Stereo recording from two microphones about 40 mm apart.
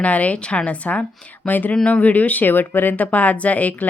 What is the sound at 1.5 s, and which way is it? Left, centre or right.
Speech, left.